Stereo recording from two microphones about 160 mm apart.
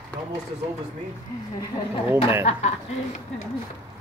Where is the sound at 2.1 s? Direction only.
15° right (ahead or behind).